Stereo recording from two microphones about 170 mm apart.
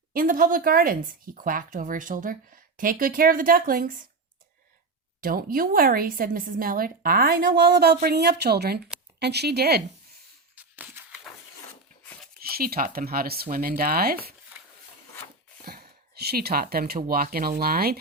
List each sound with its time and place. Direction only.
0.1 s speech: 55° right (ahead or behind)
5.2 s speech: 60° right (ahead or behind)
10.5 s a sound: 10° right (ahead or behind)
12.4 s speech: 60° right (ahead or behind)
15.6 s speech: 65° right (ahead or behind)